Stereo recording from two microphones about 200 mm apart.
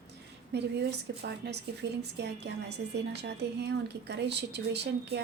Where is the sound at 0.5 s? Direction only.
55° right (ahead or behind).